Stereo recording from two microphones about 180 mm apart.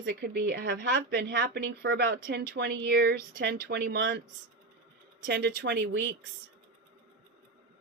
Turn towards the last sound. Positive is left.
turn(degrees=-70)  # may be behind; listen again after turning